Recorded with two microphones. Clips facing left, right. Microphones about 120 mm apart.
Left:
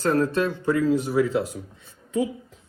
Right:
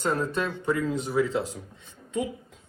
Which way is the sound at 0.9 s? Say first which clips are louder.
Left 5 dB; 25° right (ahead or behind).